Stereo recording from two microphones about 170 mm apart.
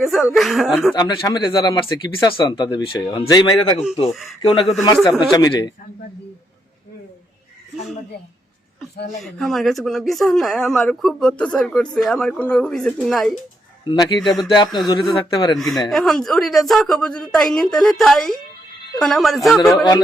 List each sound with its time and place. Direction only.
0.0 s speech: centre (ahead or behind)
0.9 s speech: 25° left (ahead or behind)
4.1 s speech: centre (ahead or behind)
4.4 s speech: 30° left (ahead or behind)
9.2 s speech: centre (ahead or behind)
13.8 s speech: 25° left (ahead or behind)
14.2 s speech: centre (ahead or behind)
14.4 s speech: 25° left (ahead or behind)
15.5 s speech: centre (ahead or behind)